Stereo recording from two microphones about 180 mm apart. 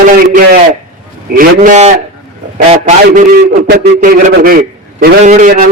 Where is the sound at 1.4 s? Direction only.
45° right (ahead or behind).